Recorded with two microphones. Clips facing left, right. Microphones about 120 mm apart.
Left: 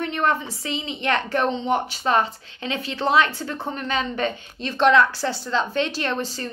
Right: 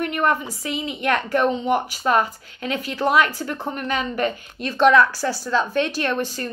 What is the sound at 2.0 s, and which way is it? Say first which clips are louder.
Speech: right 1 dB; 50° right (ahead or behind).